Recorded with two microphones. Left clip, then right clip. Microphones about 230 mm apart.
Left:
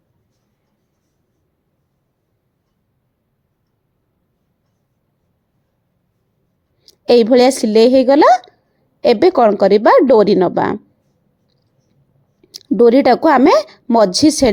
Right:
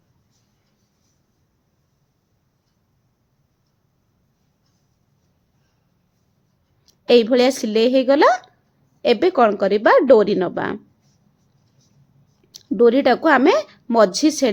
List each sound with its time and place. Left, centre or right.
6.8 s speech: left
12.7 s speech: left